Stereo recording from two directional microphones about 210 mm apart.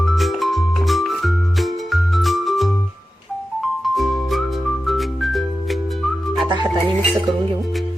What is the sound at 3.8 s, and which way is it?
Music, centre (ahead or behind).